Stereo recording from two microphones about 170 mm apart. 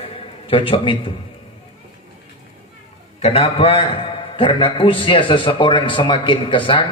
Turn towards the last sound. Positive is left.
turn(degrees=30)  # may be behind; listen again after turning